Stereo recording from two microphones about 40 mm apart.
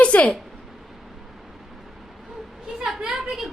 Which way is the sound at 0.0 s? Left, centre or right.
Left.